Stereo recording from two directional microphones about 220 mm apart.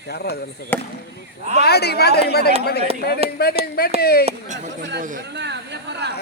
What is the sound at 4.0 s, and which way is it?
Speech, 45° left (ahead or behind).